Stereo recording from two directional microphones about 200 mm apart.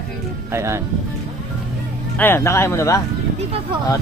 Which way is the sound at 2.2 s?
10° left (ahead or behind).